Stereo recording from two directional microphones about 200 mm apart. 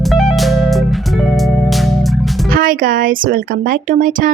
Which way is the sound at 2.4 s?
45° right (ahead or behind).